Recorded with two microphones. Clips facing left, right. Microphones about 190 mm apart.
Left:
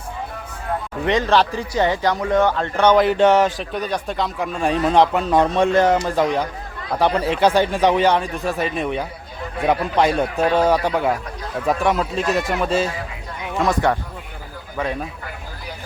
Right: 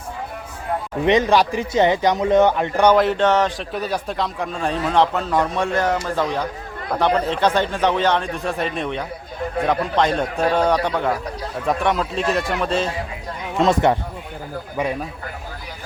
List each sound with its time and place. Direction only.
1.0 s a man's voice: 20° right (ahead or behind)
2.9 s a man's voice: centre (ahead or behind)
3.2 s a man's voice: 10° left (ahead or behind)
4.6 s a man's voice: 15° left (ahead or behind)
13.6 s a man's voice: 20° right (ahead or behind)